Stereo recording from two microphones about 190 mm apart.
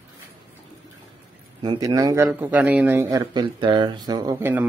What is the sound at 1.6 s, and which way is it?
Speech, 20° right (ahead or behind).